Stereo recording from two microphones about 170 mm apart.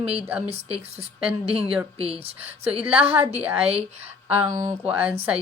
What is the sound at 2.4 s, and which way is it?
Speech, 10° right (ahead or behind).